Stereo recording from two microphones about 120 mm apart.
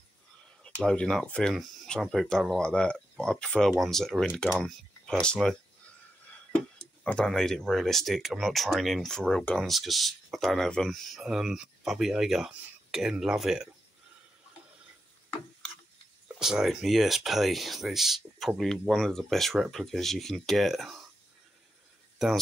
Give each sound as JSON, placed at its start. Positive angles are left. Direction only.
{"t": 0.7, "sound": "speech", "side_deg": 10}
{"t": 16.3, "sound": "speech", "side_deg": -5}